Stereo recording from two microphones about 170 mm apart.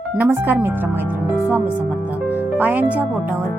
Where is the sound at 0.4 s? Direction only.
15° right (ahead or behind).